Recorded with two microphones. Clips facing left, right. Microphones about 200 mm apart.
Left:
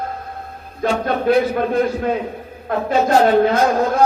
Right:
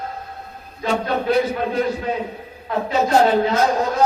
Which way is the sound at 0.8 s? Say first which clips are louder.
Left 3 dB; 50° left (ahead or behind).